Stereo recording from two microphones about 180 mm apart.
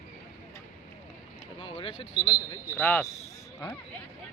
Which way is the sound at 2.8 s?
5° left (ahead or behind).